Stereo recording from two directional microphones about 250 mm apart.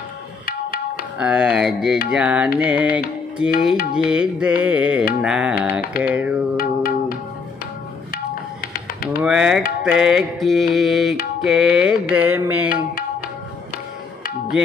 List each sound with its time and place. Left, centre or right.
1.1 s music: centre
6.5 s music: left
9.2 s music: centre